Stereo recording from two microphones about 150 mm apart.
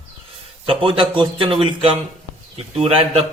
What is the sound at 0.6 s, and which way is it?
A man's voice, 35° right (ahead or behind).